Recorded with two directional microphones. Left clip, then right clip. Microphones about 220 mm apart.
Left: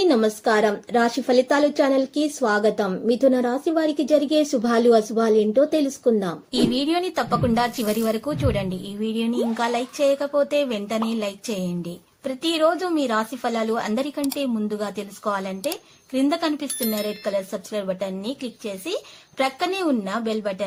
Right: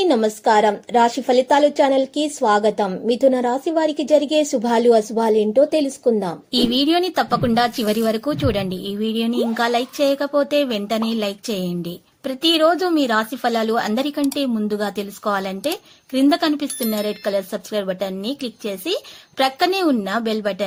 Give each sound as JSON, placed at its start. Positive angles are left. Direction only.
{"t": 0.0, "sound": "a woman's voice", "side_deg": -15}
{"t": 16.6, "sound": "speech", "side_deg": 0}
{"t": 17.1, "sound": "speech", "side_deg": -20}